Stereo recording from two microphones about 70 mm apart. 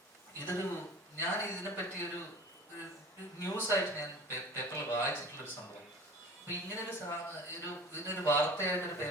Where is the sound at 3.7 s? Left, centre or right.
Left.